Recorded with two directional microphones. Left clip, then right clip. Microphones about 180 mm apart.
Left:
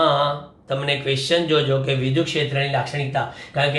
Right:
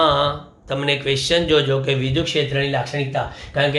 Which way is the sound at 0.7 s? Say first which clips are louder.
Right 2 dB; 25° right (ahead or behind).